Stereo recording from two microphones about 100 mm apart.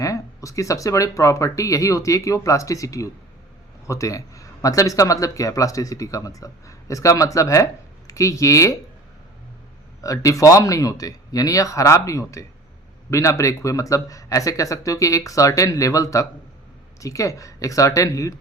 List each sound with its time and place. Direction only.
0.0 s speech: 35° left (ahead or behind)
10.0 s speech: 35° left (ahead or behind)